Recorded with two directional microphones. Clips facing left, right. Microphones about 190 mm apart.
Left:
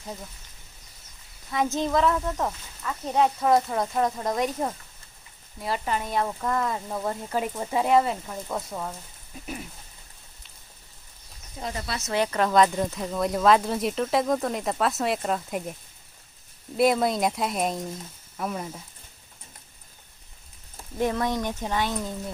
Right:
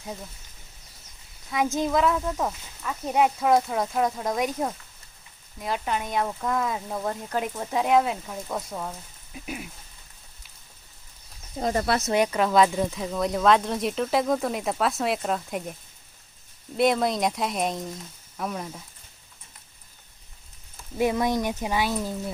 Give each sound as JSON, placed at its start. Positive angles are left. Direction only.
{"t": 1.5, "sound": "speech", "side_deg": 0}
{"t": 11.6, "sound": "speech", "side_deg": -55}
{"t": 12.1, "sound": "speech", "side_deg": -10}
{"t": 16.7, "sound": "speech", "side_deg": 0}
{"t": 21.0, "sound": "speech", "side_deg": -10}